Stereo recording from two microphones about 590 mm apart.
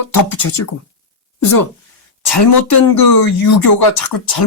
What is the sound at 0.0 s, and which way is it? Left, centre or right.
Speech, left.